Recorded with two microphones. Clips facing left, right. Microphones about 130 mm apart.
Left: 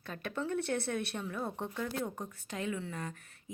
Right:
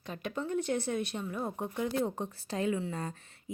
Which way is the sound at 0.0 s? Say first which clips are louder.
Right 1 dB; 15° right (ahead or behind).